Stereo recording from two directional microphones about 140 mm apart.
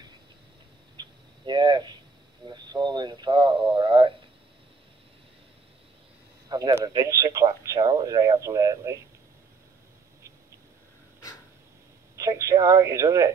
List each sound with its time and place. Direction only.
0.9 s a sound: 35° right (ahead or behind)
2.4 s speech: 30° right (ahead or behind)
6.5 s speech: 25° right (ahead or behind)
12.2 s speech: 20° right (ahead or behind)